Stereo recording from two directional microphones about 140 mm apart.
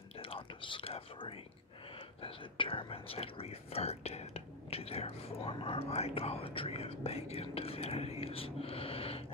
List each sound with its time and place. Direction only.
0.2 s whispering: 40° left (ahead or behind)
2.2 s speech: 40° left (ahead or behind)